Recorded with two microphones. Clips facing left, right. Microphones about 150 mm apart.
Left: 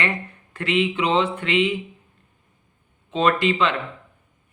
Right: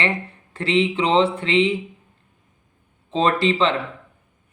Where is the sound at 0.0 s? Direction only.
30° right (ahead or behind).